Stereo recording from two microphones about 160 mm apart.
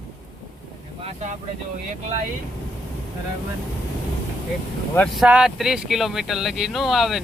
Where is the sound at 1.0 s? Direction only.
40° right (ahead or behind).